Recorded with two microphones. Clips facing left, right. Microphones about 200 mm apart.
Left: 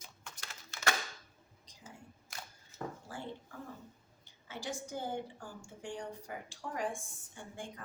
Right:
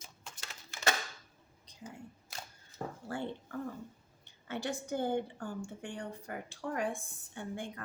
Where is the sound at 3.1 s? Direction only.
65° right (ahead or behind).